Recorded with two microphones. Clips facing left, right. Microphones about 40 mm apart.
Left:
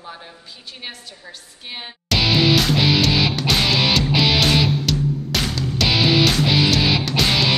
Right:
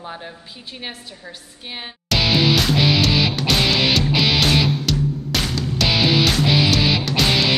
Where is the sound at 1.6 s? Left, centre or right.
Centre.